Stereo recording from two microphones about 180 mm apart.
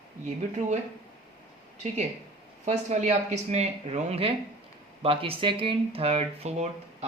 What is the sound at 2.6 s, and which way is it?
Speech, 40° right (ahead or behind).